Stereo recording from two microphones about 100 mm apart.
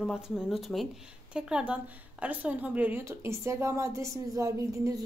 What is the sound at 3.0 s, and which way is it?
A woman's voice, 25° right (ahead or behind).